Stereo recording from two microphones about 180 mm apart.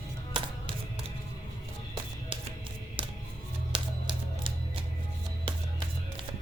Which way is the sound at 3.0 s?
30° right (ahead or behind).